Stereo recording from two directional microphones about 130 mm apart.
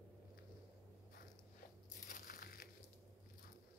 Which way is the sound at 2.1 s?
90° left.